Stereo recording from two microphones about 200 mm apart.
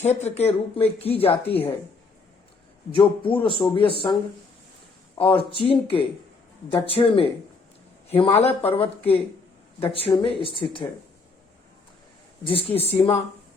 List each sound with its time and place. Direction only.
0.0 s speech: 35° left (ahead or behind)
2.9 s speech: 25° left (ahead or behind)
5.1 s speech: 25° left (ahead or behind)
12.5 s speech: 25° left (ahead or behind)